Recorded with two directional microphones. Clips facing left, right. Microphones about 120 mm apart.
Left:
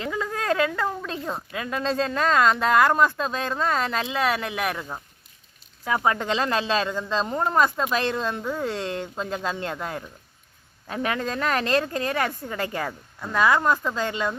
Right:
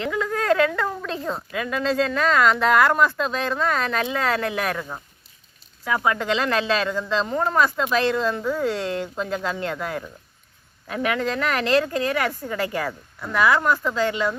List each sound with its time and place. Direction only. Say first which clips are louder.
0.1 s a sound: right 4 dB; 25° left (ahead or behind)
1.5 s speech: right 3 dB; 30° left (ahead or behind)
2.6 s speech: right 1 dB; 20° left (ahead or behind)
5.8 s speech: right 1 dB; 25° left (ahead or behind)